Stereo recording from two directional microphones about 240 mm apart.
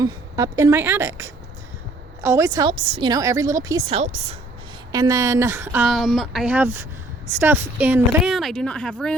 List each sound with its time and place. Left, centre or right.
0.0 s a woman's voice: centre
4.9 s a woman's voice: centre